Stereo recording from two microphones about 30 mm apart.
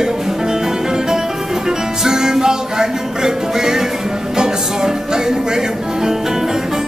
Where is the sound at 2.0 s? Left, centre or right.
Right.